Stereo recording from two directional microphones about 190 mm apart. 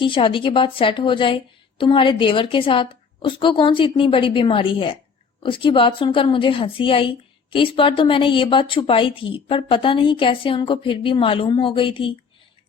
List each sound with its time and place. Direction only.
0.0 s a woman's voice: 25° left (ahead or behind)